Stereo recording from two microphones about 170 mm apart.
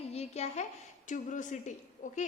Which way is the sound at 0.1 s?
40° left (ahead or behind).